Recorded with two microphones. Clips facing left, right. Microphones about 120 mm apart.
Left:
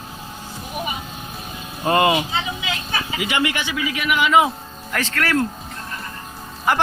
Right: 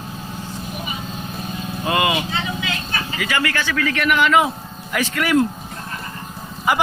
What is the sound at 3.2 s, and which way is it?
Speech, 20° left (ahead or behind).